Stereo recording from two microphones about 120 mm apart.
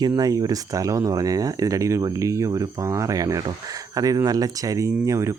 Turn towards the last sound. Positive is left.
turn(degrees=-25)  # may be behind; listen again after turning